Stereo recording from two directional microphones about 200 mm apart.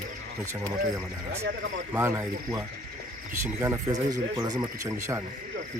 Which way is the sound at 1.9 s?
10° right (ahead or behind).